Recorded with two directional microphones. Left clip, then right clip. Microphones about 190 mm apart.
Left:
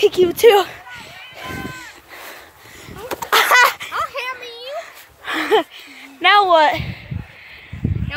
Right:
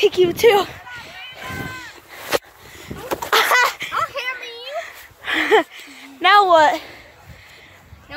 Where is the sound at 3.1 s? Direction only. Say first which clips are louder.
Left 3 dB; 50° left (ahead or behind).